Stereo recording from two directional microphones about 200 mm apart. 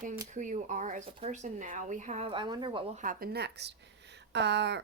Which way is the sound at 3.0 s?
45° right (ahead or behind).